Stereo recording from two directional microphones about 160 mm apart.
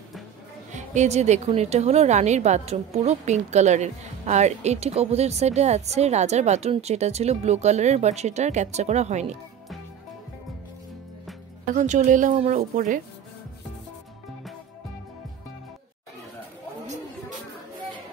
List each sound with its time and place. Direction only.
0.7 s a woman's voice: 50° right (ahead or behind)
11.7 s a woman's voice: 50° right (ahead or behind)